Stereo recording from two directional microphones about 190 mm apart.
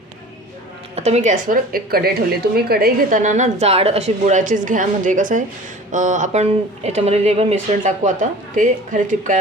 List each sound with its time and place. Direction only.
0.9 s a woman's voice: 35° right (ahead or behind)